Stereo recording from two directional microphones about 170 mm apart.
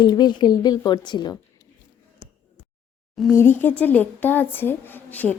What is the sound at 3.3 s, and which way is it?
Speech, 15° left (ahead or behind).